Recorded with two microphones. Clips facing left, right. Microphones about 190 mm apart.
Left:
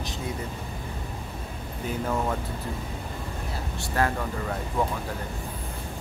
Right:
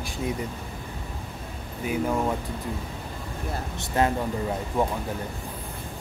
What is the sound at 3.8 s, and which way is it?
Speech, 20° right (ahead or behind).